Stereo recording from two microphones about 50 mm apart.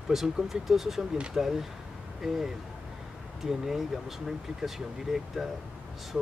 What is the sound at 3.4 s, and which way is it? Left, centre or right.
Speech, centre.